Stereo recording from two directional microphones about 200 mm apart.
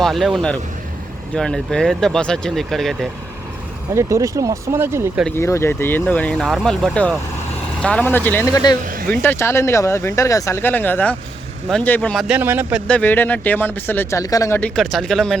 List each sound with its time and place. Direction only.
0.0 s speech: centre (ahead or behind)
3.9 s speech: 15° right (ahead or behind)
5.4 s speech: 15° left (ahead or behind)
12.3 s speech: 10° right (ahead or behind)
12.9 s speech: 10° left (ahead or behind)
14.8 s speech: centre (ahead or behind)